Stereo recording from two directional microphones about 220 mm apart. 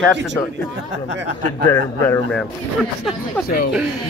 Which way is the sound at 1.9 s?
15° left (ahead or behind).